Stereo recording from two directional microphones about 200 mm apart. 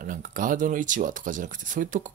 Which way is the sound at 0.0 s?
45° right (ahead or behind).